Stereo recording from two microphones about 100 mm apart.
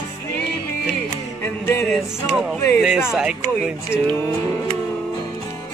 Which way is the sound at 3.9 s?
25° left (ahead or behind).